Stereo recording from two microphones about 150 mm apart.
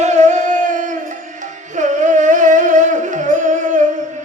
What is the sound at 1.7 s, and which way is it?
Music, 55° right (ahead or behind).